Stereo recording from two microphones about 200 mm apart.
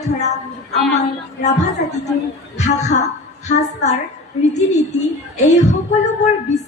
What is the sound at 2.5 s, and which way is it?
Speech, 35° left (ahead or behind).